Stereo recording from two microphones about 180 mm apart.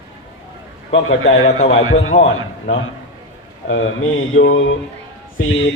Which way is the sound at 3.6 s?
90° left.